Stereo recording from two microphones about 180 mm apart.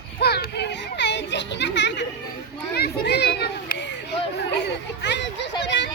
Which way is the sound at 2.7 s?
65° left (ahead or behind).